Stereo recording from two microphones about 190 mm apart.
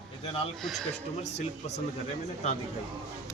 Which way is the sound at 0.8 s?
35° left (ahead or behind).